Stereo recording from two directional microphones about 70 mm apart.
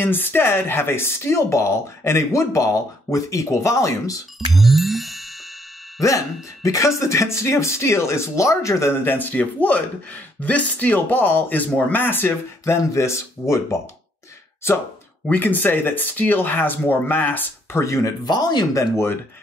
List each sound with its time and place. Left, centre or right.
0.0 s speech: left
4.6 s music: centre
5.9 s speech: left
15.2 s speech: left
17.7 s speech: left
18.2 s speech: left
18.7 s speech: left